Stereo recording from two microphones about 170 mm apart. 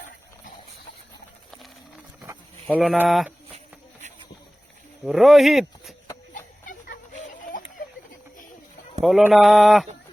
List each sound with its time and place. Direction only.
2.6 s speech: 5° right (ahead or behind)
5.0 s speech: centre (ahead or behind)
6.3 s a sound: 50° left (ahead or behind)
9.0 s speech: centre (ahead or behind)